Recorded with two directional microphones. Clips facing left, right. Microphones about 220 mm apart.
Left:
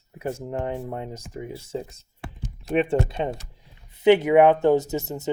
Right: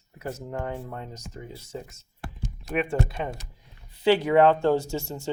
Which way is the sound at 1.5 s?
30° left (ahead or behind).